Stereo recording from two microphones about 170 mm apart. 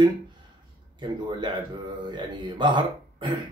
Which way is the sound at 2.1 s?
25° right (ahead or behind).